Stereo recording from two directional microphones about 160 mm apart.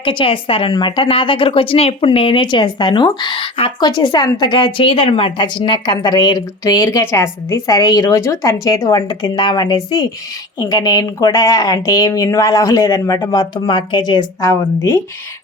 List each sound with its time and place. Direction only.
0.0 s a woman's voice: 30° left (ahead or behind)